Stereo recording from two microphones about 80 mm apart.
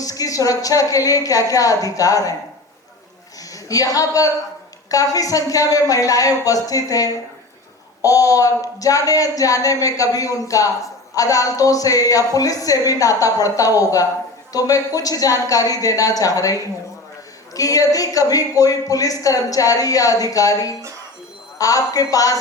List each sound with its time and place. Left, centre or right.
0.0 s a woman's voice: left
3.5 s a woman's voice: left